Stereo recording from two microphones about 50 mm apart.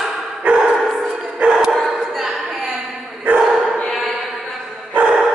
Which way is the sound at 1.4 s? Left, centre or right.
Centre.